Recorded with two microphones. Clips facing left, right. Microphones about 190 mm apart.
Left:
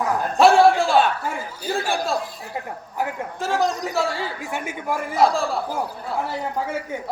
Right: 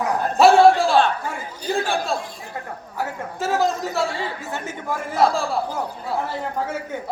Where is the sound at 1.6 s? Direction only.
5° left (ahead or behind).